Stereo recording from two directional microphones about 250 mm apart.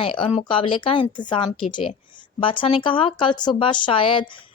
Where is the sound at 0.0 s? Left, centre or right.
Left.